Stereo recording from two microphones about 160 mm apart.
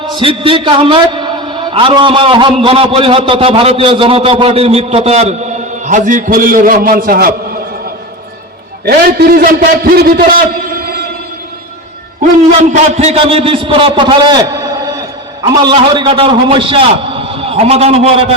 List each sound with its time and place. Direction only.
0.1 s a man's voice: 35° right (ahead or behind)
5.8 s a man's voice: 50° right (ahead or behind)
8.8 s a man's voice: 80° right
12.5 s a man's voice: 40° right (ahead or behind)